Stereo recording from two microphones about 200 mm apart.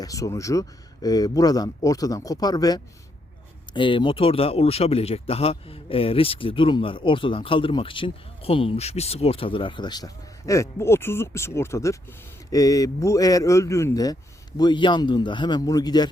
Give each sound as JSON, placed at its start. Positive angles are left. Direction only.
{"t": 0.0, "sound": "speech", "side_deg": 15}